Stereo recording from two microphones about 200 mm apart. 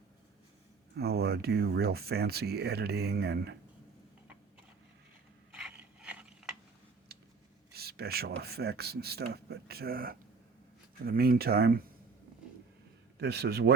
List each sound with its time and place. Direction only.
0.9 s speech: 50° right (ahead or behind)
5.5 s a sound: 5° right (ahead or behind)
7.7 s speech: 50° right (ahead or behind)
13.1 s speech: 55° right (ahead or behind)